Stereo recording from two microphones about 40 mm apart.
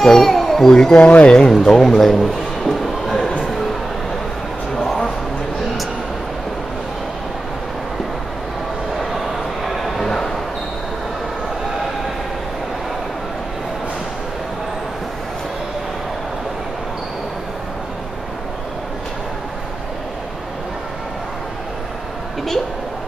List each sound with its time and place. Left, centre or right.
0.0 s speech: centre
0.9 s speech: left
1.7 s a man's voice: centre
2.7 s a sound: centre
4.7 s a sound: centre
9.1 s bow-wow: centre